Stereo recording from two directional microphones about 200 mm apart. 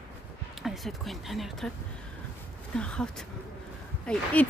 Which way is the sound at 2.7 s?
5° left (ahead or behind).